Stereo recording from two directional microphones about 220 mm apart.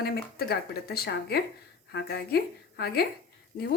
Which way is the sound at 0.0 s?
45° left (ahead or behind).